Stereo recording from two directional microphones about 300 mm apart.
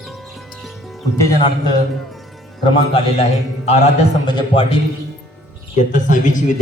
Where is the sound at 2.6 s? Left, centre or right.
Centre.